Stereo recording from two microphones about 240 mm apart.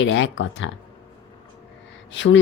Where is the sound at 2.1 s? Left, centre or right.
Left.